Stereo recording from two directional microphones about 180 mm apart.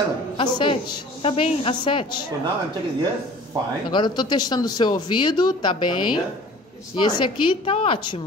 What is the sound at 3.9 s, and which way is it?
Speech, 25° left (ahead or behind).